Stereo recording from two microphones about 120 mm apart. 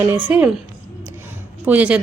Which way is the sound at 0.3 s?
15° right (ahead or behind).